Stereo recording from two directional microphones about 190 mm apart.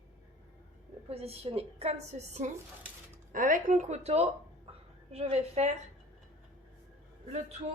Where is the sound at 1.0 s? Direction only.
30° right (ahead or behind).